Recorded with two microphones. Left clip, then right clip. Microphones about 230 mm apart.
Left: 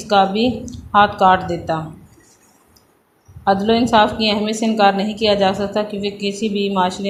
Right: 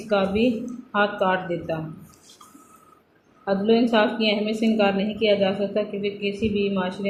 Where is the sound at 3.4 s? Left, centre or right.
Left.